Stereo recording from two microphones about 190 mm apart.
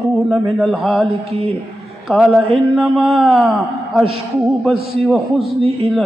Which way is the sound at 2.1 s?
5° right (ahead or behind).